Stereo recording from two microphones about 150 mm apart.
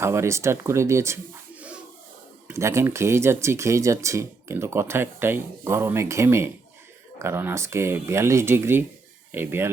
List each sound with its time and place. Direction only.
0.0 s speech: 20° right (ahead or behind)